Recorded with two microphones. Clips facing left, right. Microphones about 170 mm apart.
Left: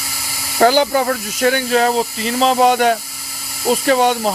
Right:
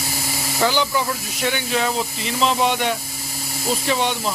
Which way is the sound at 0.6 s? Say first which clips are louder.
Left 8 dB; 45° left (ahead or behind).